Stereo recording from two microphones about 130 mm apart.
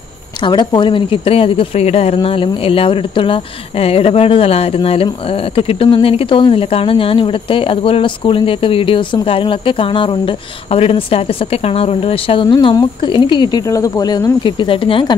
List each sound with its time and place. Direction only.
0.4 s speech: 35° left (ahead or behind)